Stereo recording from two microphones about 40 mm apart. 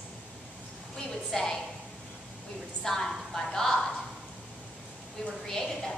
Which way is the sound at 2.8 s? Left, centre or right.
Centre.